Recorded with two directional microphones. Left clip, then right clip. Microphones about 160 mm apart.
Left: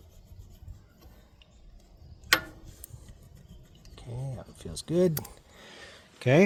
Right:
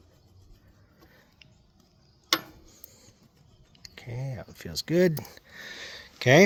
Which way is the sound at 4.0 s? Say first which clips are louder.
Right 3 dB; 30° right (ahead or behind).